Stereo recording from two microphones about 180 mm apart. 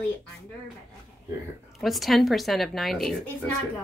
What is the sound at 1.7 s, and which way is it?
A woman's voice, centre (ahead or behind).